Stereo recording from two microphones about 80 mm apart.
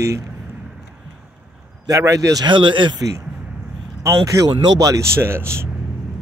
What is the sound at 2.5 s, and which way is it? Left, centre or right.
Speech, right.